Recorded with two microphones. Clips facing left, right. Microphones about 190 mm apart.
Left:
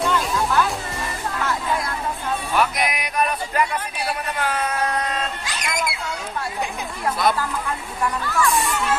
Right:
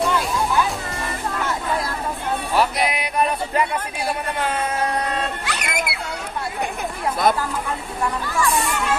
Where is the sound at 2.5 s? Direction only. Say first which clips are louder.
Right 2 dB; 30° right (ahead or behind).